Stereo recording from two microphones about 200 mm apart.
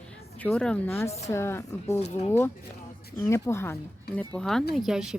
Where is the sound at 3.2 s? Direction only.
15° left (ahead or behind).